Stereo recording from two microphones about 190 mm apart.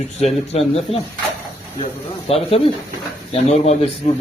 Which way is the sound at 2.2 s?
30° left (ahead or behind).